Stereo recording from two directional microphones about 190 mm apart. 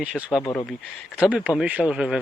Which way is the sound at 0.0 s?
5° right (ahead or behind).